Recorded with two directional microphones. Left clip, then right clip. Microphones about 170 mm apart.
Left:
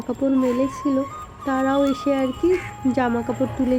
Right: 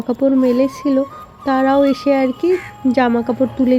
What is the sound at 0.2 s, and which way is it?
Speech, 25° right (ahead or behind).